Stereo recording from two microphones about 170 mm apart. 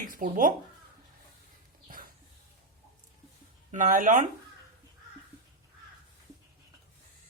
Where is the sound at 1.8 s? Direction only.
55° right (ahead or behind).